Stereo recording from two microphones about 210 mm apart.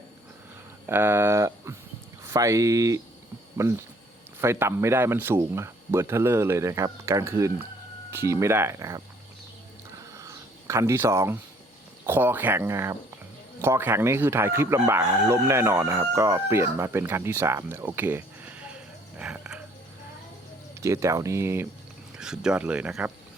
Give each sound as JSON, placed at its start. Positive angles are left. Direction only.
{"t": 0.9, "sound": "speech", "side_deg": -10}
{"t": 10.2, "sound": "a sound", "side_deg": -15}
{"t": 12.0, "sound": "speech", "side_deg": -10}
{"t": 20.8, "sound": "speech", "side_deg": -15}